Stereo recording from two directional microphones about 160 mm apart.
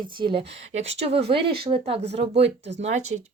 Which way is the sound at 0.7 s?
40° right (ahead or behind).